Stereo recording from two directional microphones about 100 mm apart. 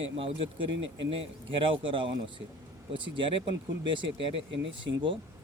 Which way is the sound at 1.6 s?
60° right (ahead or behind).